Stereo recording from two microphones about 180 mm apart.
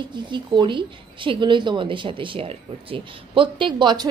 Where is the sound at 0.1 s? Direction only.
25° right (ahead or behind).